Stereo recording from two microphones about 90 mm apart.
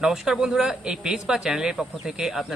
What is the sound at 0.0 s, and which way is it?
Speech, 5° right (ahead or behind).